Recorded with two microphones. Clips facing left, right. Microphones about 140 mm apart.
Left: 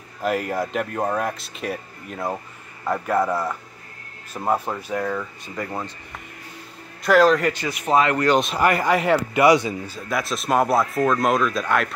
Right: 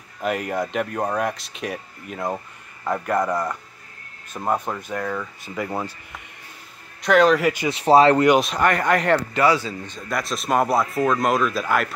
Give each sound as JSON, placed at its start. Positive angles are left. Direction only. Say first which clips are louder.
{"t": 0.2, "sound": "speech", "louder": "left 1 dB", "side_deg": 0}
{"t": 5.7, "sound": "speech", "louder": "right 2 dB", "side_deg": -10}
{"t": 7.0, "sound": "speech", "louder": "even", "side_deg": 5}
{"t": 7.7, "sound": "speech", "louder": "right 6 dB", "side_deg": -35}
{"t": 8.4, "sound": "speech", "louder": "even", "side_deg": 5}
{"t": 9.8, "sound": "speech", "louder": "left 1 dB", "side_deg": 5}